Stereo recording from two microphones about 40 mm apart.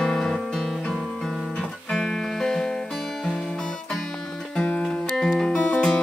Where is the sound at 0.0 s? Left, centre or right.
Centre.